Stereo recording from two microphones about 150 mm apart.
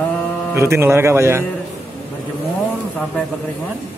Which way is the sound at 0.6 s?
15° right (ahead or behind).